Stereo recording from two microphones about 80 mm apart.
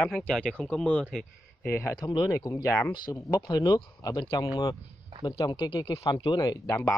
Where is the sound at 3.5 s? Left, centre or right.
Left.